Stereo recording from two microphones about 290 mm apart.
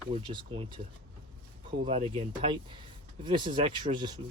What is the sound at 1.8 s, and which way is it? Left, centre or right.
Speech, centre.